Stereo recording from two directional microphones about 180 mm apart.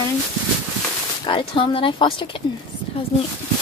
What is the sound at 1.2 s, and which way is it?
Speech, 30° left (ahead or behind).